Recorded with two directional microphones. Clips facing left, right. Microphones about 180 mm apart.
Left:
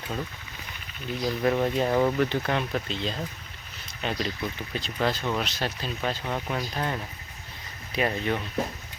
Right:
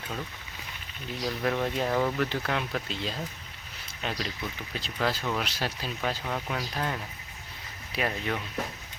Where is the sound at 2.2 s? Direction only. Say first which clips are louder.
Left 4 dB; centre (ahead or behind).